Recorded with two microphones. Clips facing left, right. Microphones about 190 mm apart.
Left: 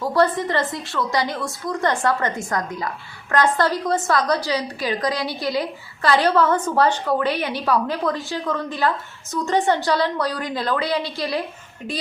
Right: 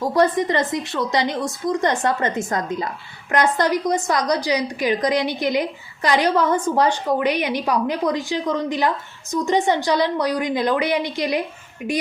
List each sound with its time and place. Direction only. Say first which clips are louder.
0.0 s a woman's voice: right 1 dB; 15° right (ahead or behind)